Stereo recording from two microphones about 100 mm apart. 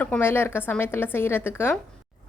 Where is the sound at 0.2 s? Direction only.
25° left (ahead or behind).